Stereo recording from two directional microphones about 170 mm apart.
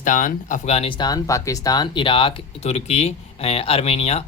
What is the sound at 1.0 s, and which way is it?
Speech, 20° left (ahead or behind).